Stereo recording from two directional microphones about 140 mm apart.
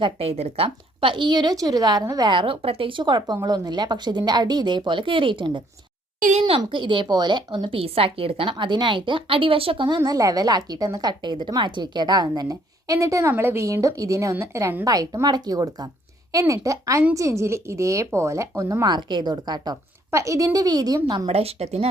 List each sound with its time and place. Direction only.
0.0 s a woman's voice: 45° right (ahead or behind)
6.1 s a child's voice: 70° right (ahead or behind)
6.4 s a woman's voice: 35° right (ahead or behind)
21.2 s a woman's voice: 45° right (ahead or behind)